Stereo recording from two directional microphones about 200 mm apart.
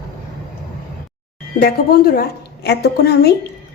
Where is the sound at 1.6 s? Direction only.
50° left (ahead or behind).